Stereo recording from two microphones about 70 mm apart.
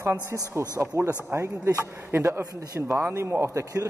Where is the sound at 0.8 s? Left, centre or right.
Right.